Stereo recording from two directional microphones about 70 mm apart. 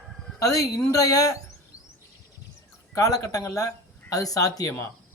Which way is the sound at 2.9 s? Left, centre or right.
Left.